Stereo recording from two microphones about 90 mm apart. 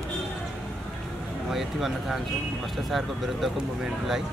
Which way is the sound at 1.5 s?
5° right (ahead or behind).